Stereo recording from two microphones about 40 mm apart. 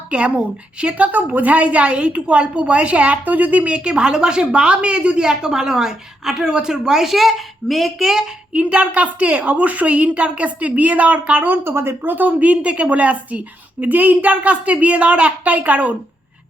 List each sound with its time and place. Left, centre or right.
0.1 s a woman's voice: right
3.8 s a woman's voice: right; by 7.9 s centre
7.9 s a woman's voice: centre
8.5 s a woman's voice: right
11.4 s speech: right
12.0 s a woman's voice: right
13.8 s a woman's voice: right